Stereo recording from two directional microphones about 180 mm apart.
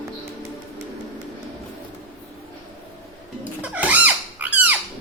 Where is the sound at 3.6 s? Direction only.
10° right (ahead or behind).